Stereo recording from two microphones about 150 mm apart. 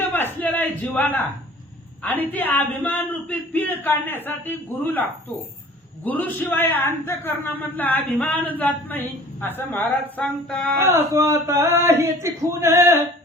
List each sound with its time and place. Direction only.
0.3 s a sound: 10° left (ahead or behind)
2.0 s a man's voice: 10° left (ahead or behind)
6.1 s a man's voice: 10° left (ahead or behind)
10.8 s speech: 20° right (ahead or behind)